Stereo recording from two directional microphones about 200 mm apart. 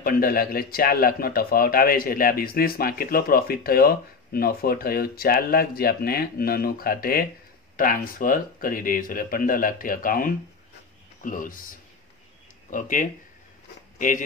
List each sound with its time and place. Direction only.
0.0 s speech: 50° left (ahead or behind)